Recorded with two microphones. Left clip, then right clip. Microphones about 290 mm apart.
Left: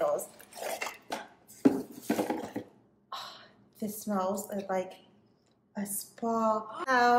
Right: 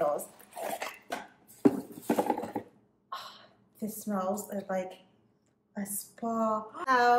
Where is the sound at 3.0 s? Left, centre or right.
Centre.